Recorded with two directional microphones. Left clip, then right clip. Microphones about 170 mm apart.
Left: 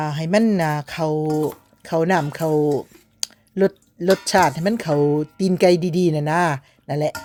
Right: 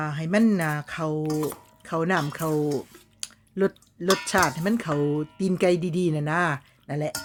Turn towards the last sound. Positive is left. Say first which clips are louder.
# left 8 dB
turn(degrees=35)  # may be behind; listen again after turning